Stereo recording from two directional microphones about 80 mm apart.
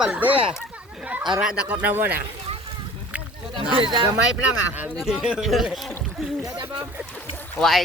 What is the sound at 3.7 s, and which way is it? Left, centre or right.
Speech, right.